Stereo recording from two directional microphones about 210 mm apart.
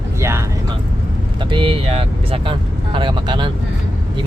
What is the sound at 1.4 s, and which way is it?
Speech, 25° right (ahead or behind).